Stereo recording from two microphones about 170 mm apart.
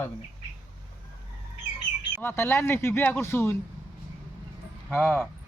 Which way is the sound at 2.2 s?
15° left (ahead or behind).